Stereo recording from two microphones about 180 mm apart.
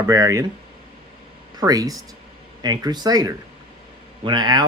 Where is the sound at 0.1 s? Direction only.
20° right (ahead or behind).